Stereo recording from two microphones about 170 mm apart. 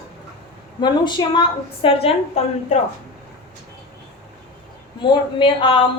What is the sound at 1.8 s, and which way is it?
Speech, 35° left (ahead or behind).